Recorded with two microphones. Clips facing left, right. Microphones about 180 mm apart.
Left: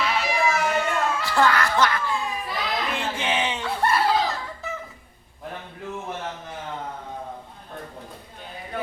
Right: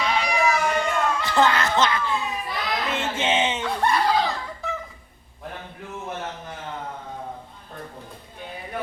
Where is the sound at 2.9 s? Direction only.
25° right (ahead or behind).